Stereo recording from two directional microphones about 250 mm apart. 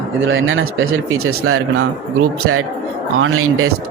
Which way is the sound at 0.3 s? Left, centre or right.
Right.